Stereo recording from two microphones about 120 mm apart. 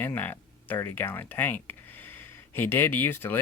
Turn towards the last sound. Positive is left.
turn(degrees=15)  # may be behind; listen again after turning